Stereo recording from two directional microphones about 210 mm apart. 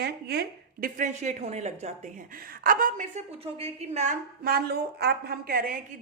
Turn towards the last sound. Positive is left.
turn(degrees=-45)  # may be behind; listen again after turning